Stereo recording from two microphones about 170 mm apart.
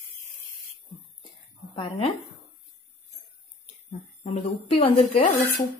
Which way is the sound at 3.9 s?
40° left (ahead or behind).